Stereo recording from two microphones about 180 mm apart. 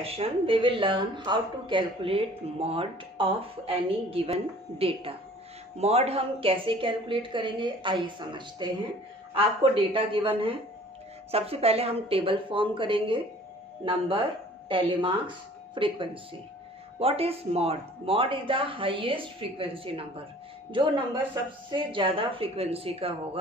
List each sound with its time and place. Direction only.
0.0 s speech: 35° right (ahead or behind)